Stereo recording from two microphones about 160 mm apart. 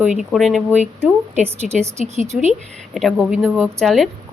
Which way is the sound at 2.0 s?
40° left (ahead or behind).